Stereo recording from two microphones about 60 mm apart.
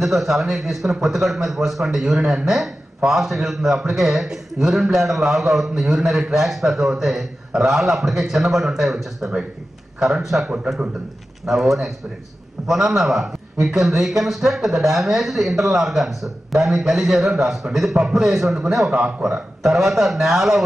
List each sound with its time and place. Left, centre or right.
0.0 s a man's voice: centre
18.9 s speech: centre
19.6 s a man's voice: centre